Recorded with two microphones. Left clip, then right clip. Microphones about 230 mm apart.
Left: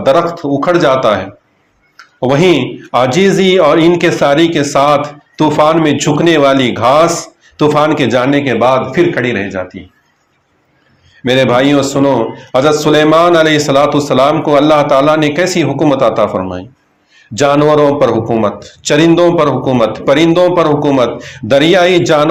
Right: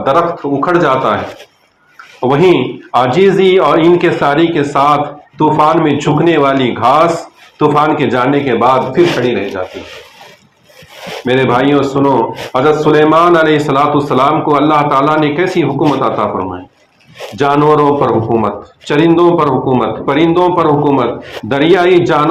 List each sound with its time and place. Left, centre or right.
0.0 s speech: left
2.2 s speech: left
11.3 s speech: left